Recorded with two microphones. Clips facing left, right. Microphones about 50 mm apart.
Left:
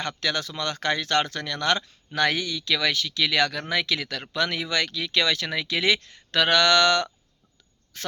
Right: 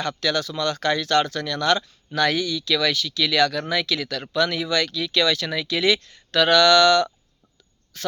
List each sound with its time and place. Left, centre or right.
0.0 s a man's voice: left